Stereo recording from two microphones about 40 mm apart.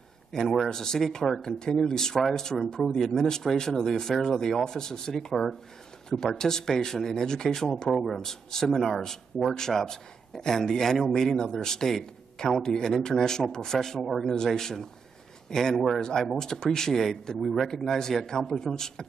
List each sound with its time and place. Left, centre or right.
0.3 s speech: centre
1.4 s speech: centre
6.0 s speech: centre
7.9 s speech: centre
12.5 s speech: centre
15.7 s speech: centre
16.0 s speech: centre